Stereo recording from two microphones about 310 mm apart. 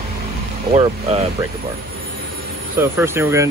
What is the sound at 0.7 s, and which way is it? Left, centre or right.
Speech, centre.